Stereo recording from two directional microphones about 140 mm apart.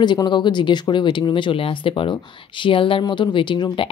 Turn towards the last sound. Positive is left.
turn(degrees=35)  # may be behind; listen again after turning